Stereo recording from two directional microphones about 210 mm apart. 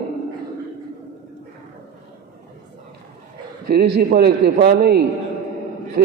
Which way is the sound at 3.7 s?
50° right (ahead or behind).